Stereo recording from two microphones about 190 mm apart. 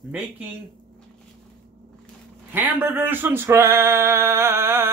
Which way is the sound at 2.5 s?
10° right (ahead or behind).